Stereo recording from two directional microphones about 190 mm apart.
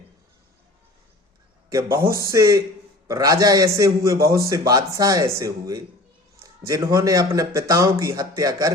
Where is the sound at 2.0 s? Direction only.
15° right (ahead or behind).